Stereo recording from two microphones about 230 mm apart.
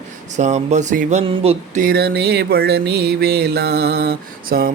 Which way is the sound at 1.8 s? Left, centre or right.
Right.